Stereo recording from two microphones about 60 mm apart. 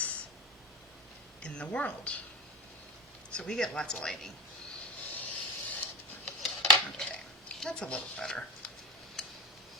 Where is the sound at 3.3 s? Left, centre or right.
Centre.